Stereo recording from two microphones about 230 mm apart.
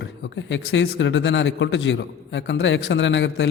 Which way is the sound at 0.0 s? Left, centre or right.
Left.